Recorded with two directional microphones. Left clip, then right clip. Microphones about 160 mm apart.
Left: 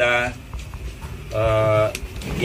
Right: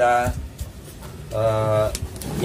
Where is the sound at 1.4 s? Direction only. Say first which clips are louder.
Left 2 dB; 10° right (ahead or behind).